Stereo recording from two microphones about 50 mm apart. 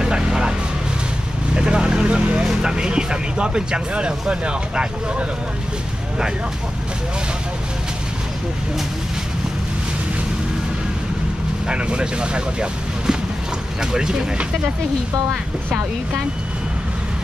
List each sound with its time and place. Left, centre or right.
0.0 s vehicle: centre
1.5 s speech: centre
11.7 s speech: centre